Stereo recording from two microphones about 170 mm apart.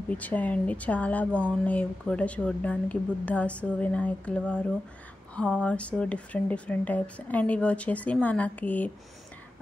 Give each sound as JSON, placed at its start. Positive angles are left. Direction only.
{"t": 0.1, "sound": "speech", "side_deg": 10}